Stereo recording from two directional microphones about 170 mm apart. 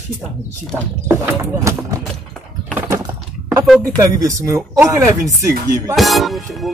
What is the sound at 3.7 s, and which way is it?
Speech, 5° left (ahead or behind).